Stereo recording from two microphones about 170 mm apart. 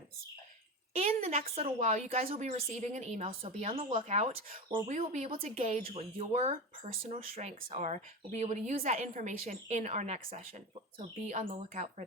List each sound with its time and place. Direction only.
0.9 s a woman's voice: 40° right (ahead or behind)